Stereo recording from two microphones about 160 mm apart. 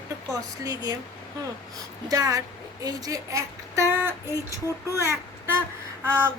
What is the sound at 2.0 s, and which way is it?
A woman's voice, 20° right (ahead or behind).